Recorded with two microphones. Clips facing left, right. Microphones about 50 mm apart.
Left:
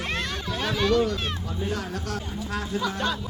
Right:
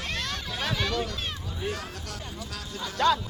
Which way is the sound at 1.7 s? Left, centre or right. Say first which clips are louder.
Left 6 dB; left.